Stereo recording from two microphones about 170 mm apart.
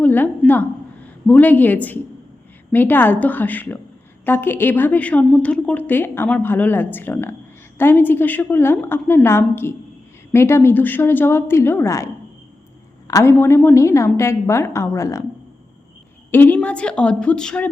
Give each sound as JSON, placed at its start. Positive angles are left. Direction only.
{"t": 0.0, "sound": "a sound", "side_deg": 10}
{"t": 1.3, "sound": "a woman's voice", "side_deg": 10}
{"t": 13.1, "sound": "a woman's voice", "side_deg": 15}
{"t": 16.3, "sound": "a woman's voice", "side_deg": 10}